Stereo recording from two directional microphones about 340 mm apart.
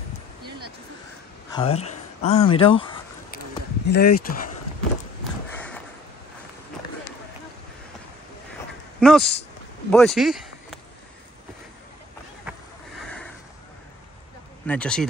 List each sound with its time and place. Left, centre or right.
1.5 s speech: centre
3.8 s speech: left
9.0 s speech: centre
14.7 s speech: centre